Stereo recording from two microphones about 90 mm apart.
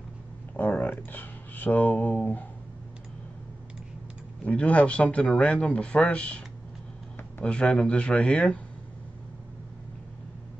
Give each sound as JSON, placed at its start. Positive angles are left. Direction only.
{"t": 0.6, "sound": "speech", "side_deg": 20}
{"t": 4.5, "sound": "speech", "side_deg": 15}
{"t": 7.4, "sound": "speech", "side_deg": 10}